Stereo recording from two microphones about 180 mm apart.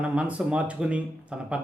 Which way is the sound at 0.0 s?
5° right (ahead or behind).